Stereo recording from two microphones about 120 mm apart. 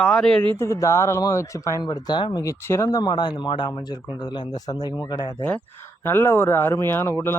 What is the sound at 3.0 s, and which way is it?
A man's voice, 40° left (ahead or behind).